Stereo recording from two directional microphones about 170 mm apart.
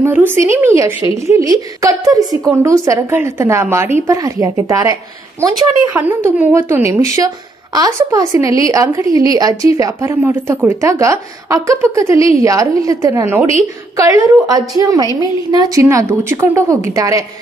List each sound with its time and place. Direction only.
0.0 s a woman's voice: 10° right (ahead or behind)
5.9 s a woman's voice: 10° right (ahead or behind)